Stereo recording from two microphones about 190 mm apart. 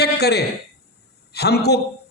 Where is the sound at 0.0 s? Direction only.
60° left (ahead or behind).